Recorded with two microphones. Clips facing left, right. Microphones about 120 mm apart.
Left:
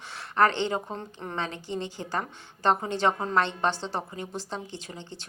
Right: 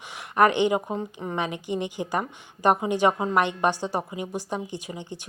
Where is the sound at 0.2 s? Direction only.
15° right (ahead or behind).